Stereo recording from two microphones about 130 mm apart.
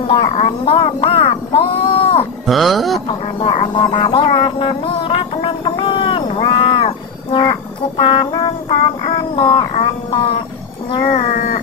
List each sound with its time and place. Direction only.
0.1 s speech: 45° left (ahead or behind)
2.4 s speech: centre (ahead or behind)
3.1 s music: 45° left (ahead or behind)
6.3 s a sound: 45° left (ahead or behind)
8.0 s music: 40° left (ahead or behind)
10.1 s speech: 45° left (ahead or behind)
10.9 s a sound: 55° left (ahead or behind); by 11.6 s 85° left